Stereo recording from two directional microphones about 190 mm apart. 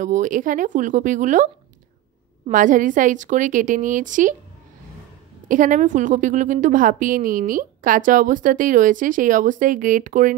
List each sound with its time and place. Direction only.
0.0 s a woman's voice: 40° right (ahead or behind)
5.5 s a woman's voice: 45° right (ahead or behind)